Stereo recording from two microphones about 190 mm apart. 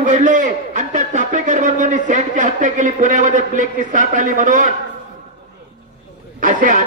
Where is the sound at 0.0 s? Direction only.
40° right (ahead or behind).